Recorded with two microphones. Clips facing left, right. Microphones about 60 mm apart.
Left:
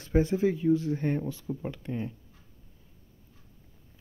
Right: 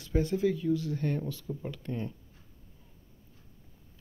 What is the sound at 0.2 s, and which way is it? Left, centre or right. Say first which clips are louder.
Speech: left 3 dB; left.